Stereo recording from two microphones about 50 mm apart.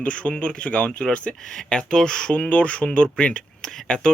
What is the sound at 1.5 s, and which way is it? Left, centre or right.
Speech, centre.